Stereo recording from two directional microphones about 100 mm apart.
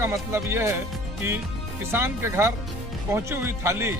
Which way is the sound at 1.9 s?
25° right (ahead or behind).